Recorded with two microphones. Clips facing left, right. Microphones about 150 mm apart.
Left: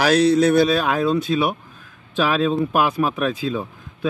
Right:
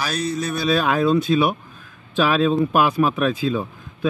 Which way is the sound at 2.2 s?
5° left (ahead or behind).